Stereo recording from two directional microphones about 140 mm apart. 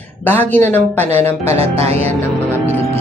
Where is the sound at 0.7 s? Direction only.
15° left (ahead or behind).